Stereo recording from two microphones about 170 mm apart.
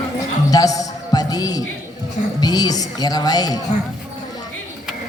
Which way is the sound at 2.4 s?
25° left (ahead or behind).